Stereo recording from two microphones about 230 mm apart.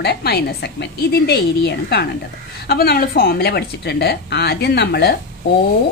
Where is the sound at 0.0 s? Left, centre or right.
Left.